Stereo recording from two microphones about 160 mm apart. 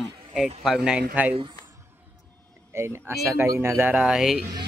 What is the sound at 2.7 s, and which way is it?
A man's voice, 15° right (ahead or behind).